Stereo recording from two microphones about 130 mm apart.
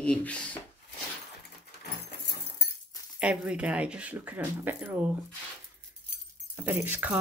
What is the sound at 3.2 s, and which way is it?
Speech, 10° right (ahead or behind).